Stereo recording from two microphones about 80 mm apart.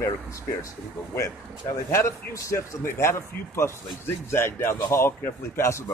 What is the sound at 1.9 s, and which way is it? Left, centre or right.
Speech, left.